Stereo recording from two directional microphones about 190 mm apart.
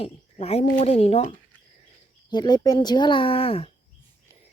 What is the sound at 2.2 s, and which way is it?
Speech, 20° left (ahead or behind).